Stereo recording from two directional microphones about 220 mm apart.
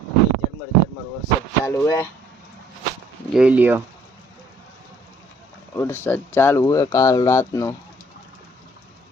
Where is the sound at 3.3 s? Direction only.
5° right (ahead or behind).